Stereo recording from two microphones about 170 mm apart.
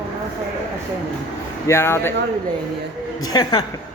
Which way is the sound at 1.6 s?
15° left (ahead or behind).